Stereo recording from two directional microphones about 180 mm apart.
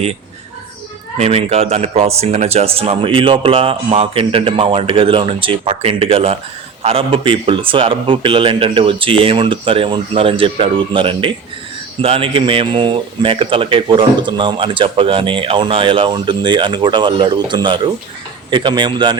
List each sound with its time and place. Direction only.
1.2 s speech: 35° right (ahead or behind)